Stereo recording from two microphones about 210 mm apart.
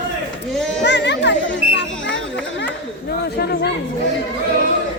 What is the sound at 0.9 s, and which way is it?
Children playing, 55° left (ahead or behind).